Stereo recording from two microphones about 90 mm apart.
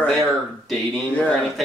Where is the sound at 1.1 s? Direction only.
15° left (ahead or behind).